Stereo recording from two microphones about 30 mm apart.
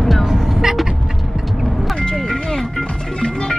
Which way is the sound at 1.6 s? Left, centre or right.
Centre.